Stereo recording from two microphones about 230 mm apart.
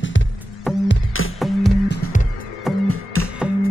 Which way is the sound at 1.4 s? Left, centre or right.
Centre.